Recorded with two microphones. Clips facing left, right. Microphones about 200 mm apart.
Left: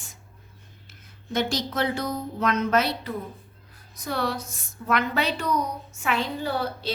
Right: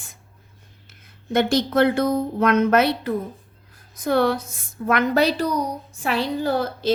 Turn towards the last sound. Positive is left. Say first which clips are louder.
# right 6 dB
turn(degrees=-45)  # may be behind; listen again after turning